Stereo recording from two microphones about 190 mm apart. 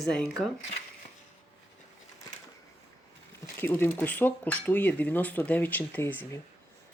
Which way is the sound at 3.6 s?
10° left (ahead or behind).